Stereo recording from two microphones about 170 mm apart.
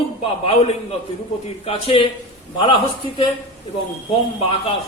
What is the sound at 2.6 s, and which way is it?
Speech, 30° left (ahead or behind).